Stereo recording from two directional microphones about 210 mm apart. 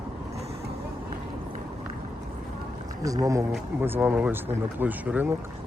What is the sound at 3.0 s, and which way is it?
Speech, 15° right (ahead or behind).